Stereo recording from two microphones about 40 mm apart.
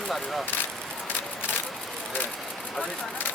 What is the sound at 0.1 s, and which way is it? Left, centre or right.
Speech, centre.